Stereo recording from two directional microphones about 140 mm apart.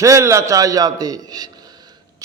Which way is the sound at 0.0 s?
20° right (ahead or behind).